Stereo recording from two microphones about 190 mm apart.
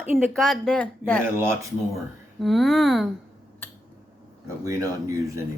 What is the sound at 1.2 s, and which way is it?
Speech, 10° right (ahead or behind).